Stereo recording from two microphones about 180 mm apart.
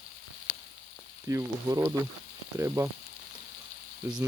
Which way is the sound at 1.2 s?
15° right (ahead or behind).